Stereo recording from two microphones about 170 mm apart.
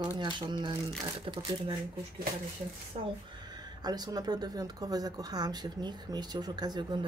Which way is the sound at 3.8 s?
25° right (ahead or behind).